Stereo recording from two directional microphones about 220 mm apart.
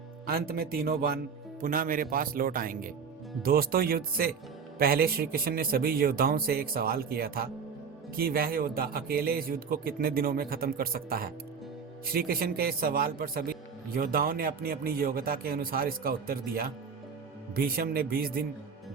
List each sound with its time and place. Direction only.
0.3 s a man's voice: 45° right (ahead or behind)